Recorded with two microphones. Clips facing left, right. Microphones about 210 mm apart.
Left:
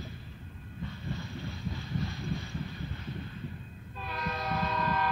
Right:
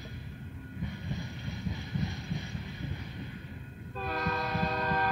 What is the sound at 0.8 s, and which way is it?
Train, 15° right (ahead or behind).